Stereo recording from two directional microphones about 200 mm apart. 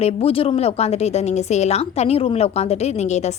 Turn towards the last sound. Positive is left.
turn(degrees=35)  # may be behind; listen again after turning